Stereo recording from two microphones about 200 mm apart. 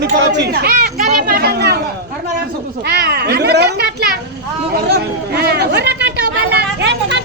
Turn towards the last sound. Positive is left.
turn(degrees=-60)  # may be behind; listen again after turning